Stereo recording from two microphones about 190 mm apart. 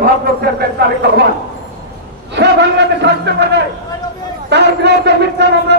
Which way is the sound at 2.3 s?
65° right (ahead or behind).